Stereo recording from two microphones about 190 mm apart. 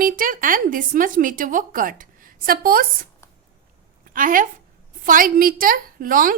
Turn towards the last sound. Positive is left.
turn(degrees=-45)  # may be behind; listen again after turning